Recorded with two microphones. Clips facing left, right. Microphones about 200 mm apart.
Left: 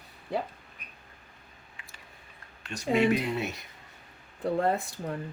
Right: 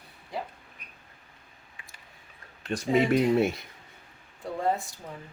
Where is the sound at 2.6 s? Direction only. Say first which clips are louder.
Right 1 dB; 50° right (ahead or behind).